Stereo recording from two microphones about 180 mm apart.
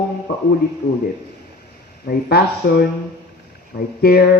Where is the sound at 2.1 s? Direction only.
60° left (ahead or behind).